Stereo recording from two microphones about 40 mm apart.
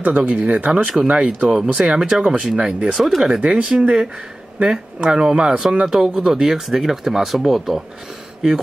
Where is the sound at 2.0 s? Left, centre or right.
Centre.